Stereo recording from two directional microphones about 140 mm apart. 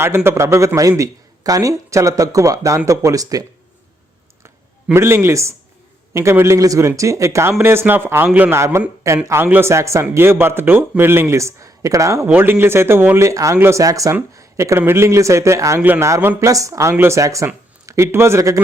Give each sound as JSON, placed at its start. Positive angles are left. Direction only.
{"t": 0.3, "sound": "a man's voice", "side_deg": -20}
{"t": 4.9, "sound": "a man's voice", "side_deg": -15}